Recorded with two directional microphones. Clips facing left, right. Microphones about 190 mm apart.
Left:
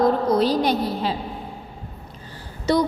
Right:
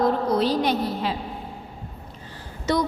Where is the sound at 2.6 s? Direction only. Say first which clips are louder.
Left 3 dB; 35° left (ahead or behind).